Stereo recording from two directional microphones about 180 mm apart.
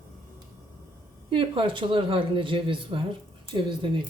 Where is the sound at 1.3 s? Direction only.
30° right (ahead or behind).